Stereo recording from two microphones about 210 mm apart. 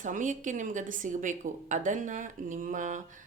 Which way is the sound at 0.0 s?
35° right (ahead or behind).